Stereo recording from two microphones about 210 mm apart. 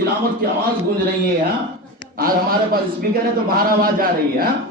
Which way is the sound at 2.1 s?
45° right (ahead or behind).